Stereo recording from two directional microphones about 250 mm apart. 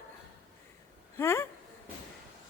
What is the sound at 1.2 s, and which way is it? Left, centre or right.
Speech, centre.